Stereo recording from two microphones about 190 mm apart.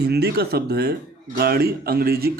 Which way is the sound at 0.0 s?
60° right (ahead or behind).